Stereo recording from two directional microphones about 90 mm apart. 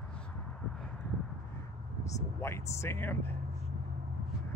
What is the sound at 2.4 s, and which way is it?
Speech, 30° left (ahead or behind).